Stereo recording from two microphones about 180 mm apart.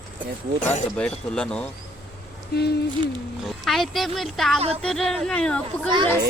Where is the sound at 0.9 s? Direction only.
5° left (ahead or behind).